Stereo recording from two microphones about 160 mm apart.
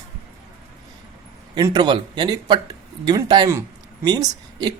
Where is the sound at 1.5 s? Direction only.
25° right (ahead or behind).